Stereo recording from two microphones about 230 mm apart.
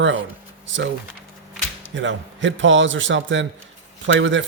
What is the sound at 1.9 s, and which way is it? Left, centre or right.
Speech, right.